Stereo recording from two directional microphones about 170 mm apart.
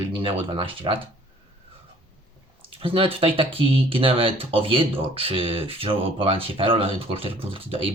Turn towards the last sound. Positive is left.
turn(degrees=-30)  # may be behind; listen again after turning